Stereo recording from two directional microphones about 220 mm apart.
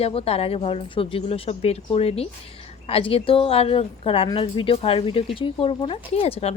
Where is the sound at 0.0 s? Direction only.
25° left (ahead or behind).